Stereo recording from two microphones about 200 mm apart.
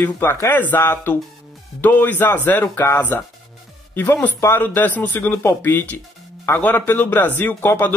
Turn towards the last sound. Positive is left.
turn(degrees=10)  # may be behind; listen again after turning